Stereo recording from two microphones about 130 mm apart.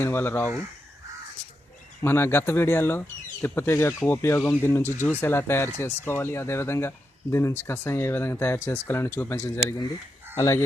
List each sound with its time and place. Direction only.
0.0 s speech: 15° left (ahead or behind)
2.0 s speech: 20° left (ahead or behind)